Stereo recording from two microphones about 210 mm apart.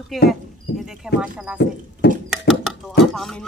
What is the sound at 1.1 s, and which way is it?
Speech, 5° right (ahead or behind).